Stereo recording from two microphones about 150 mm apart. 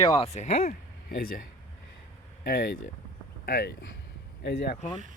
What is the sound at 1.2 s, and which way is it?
Speech, 75° left (ahead or behind).